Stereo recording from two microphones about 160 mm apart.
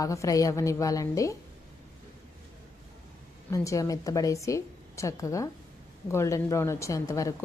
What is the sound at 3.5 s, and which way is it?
Speech, 20° left (ahead or behind).